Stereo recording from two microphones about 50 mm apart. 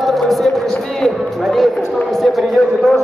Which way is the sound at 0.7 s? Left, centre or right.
Centre.